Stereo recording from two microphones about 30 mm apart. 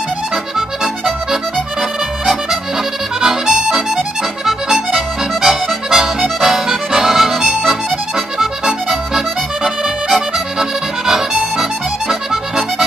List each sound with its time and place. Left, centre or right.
0.6 s accordion: centre
4.5 s accordion: centre
9.1 s accordion: right